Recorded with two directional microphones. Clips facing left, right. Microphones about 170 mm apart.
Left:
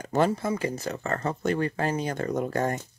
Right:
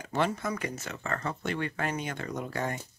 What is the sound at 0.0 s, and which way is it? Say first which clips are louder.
Speech: left 5 dB; 40° left (ahead or behind).